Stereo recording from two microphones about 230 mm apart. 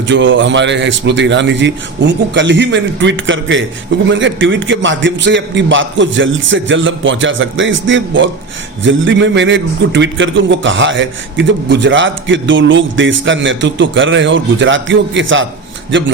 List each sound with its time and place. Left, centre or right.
0.1 s a man's voice: right